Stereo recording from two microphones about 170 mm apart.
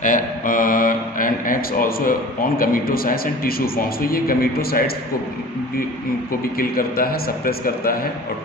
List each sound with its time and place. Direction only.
0.0 s speech: 50° left (ahead or behind)
6.6 s speech: 60° left (ahead or behind)